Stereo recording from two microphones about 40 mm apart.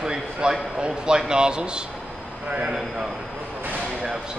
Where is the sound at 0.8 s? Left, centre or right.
Centre.